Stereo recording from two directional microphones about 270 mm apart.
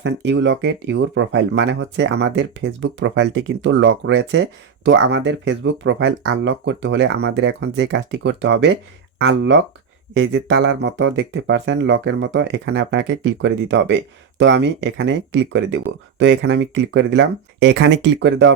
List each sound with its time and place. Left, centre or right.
0.0 s speech: right